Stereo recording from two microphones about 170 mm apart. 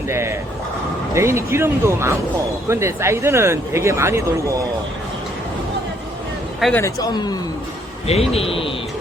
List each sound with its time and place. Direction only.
0.1 s speech: 15° right (ahead or behind)
6.6 s speech: 5° left (ahead or behind)
6.8 s speech: 25° left (ahead or behind)
8.0 s a man's voice: 35° left (ahead or behind)